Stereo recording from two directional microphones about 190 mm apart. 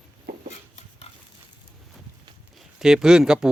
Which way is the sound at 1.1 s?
35° left (ahead or behind).